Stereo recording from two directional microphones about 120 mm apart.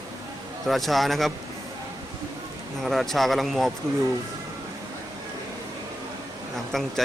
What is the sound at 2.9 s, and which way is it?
Speech, centre (ahead or behind).